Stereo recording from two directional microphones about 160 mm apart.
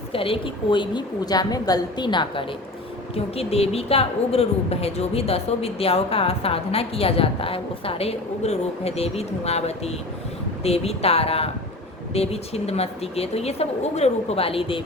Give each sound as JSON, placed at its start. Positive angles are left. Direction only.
{"t": 0.1, "sound": "a woman's voice", "side_deg": 35}